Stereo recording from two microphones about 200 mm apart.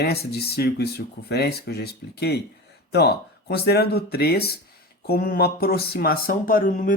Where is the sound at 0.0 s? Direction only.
55° left (ahead or behind).